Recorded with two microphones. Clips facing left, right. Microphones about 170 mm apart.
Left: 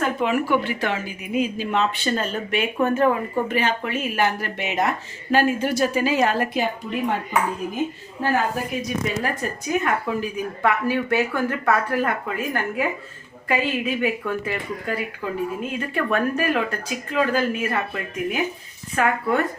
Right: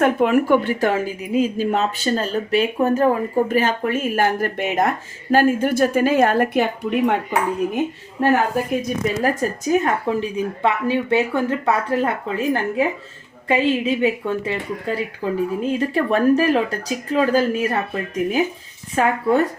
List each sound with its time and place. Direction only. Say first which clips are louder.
0.0 s speech: right 6 dB; 50° right (ahead or behind); by 8.3 s 65° right (ahead or behind)
8.8 s speech: right 4 dB; 40° right (ahead or behind); by 12.1 s 25° right (ahead or behind)
13.5 s speech: right 5 dB; 25° right (ahead or behind)